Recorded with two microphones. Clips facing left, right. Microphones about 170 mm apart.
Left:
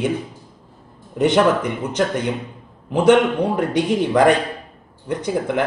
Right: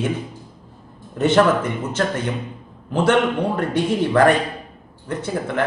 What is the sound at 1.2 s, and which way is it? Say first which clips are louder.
Speech: even; 15° left (ahead or behind).